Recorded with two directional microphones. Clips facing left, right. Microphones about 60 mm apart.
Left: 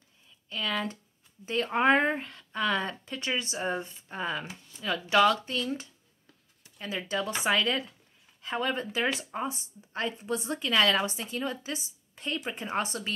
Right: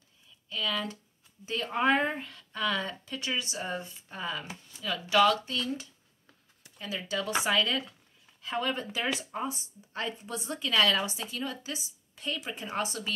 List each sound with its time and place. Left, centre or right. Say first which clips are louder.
0.5 s speech: left 1 dB; left
6.8 s speech: left 2 dB; left